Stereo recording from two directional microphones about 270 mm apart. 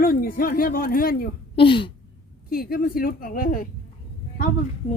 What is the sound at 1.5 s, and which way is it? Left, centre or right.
Speech, centre.